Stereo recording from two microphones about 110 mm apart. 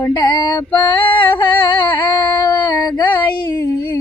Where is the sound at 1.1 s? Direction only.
45° left (ahead or behind).